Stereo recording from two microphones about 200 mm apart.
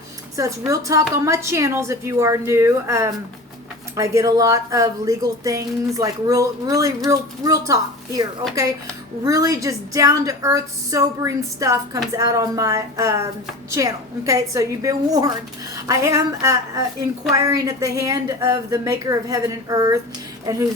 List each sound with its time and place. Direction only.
0.7 s speech: 15° right (ahead or behind)